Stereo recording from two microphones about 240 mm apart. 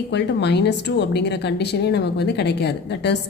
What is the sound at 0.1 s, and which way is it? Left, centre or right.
A woman's voice, left.